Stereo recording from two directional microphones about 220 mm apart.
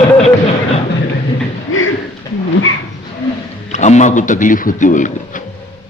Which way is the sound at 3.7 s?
30° left (ahead or behind).